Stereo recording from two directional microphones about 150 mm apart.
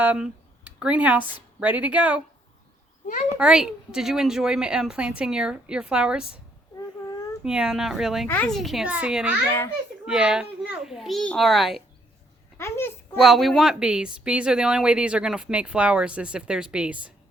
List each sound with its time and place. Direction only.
0.0 s speech: 10° right (ahead or behind)
3.3 s speech: 5° right (ahead or behind)
7.4 s a child's voice: 5° right (ahead or behind)
12.5 s a child's voice: 15° left (ahead or behind)
13.2 s speech: centre (ahead or behind)